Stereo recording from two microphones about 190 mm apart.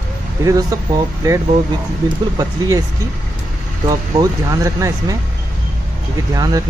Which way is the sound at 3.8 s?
20° right (ahead or behind).